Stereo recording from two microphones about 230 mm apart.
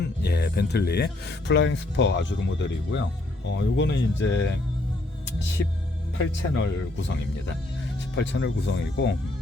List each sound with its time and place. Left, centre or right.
0.0 s speech: left
6.5 s speech: left